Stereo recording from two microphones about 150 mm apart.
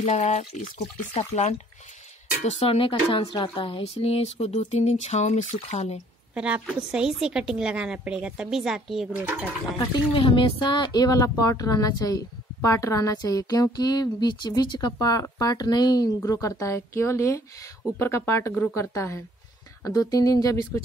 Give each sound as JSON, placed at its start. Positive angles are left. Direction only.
{"t": 0.0, "sound": "speech", "side_deg": 50}
{"t": 6.3, "sound": "a woman's voice", "side_deg": -10}
{"t": 9.1, "sound": "speech", "side_deg": -10}
{"t": 9.8, "sound": "speech", "side_deg": 35}